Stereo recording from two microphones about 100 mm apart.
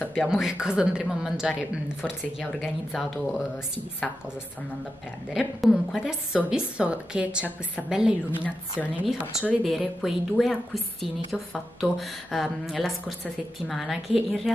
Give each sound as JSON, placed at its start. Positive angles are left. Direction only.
{"t": 0.1, "sound": "a woman's voice", "side_deg": 0}
{"t": 5.3, "sound": "a woman's voice", "side_deg": 0}
{"t": 8.5, "sound": "a woman's voice", "side_deg": 15}
{"t": 9.6, "sound": "a woman's voice", "side_deg": 0}